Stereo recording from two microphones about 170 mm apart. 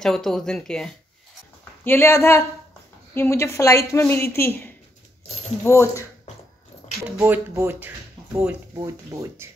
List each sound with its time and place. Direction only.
0.0 s speech: centre (ahead or behind)
1.6 s a woman's voice: 15° left (ahead or behind)
7.2 s speech: 15° right (ahead or behind)